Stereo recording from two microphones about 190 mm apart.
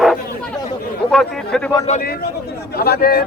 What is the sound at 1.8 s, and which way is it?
A man's voice, 45° left (ahead or behind).